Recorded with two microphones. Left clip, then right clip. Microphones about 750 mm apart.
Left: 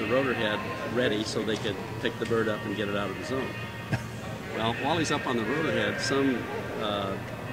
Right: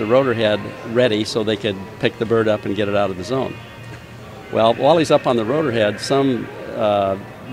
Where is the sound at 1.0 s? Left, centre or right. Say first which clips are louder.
Right 12 dB; right.